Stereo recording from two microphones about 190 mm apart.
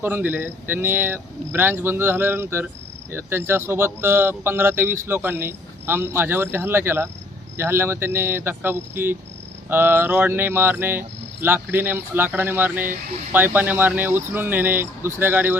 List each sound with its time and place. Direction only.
0.0 s speech: 10° right (ahead or behind)